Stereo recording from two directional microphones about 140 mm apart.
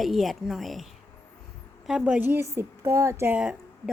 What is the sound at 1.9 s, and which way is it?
A woman's voice, 5° right (ahead or behind).